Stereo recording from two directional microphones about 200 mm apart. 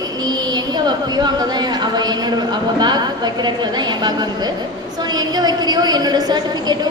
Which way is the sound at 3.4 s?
20° right (ahead or behind).